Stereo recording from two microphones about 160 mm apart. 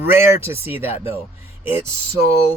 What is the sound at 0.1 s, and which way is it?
Speech, 15° right (ahead or behind).